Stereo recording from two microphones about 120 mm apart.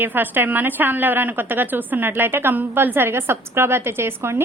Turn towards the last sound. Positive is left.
turn(degrees=-20)  # may be behind; listen again after turning